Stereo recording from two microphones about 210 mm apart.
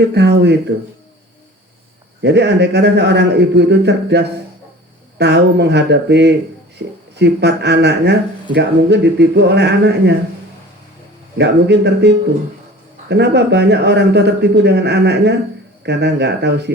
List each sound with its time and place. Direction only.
0.0 s speech: 55° right (ahead or behind)
2.2 s speech: 55° right (ahead or behind)
11.3 s speech: 55° right (ahead or behind)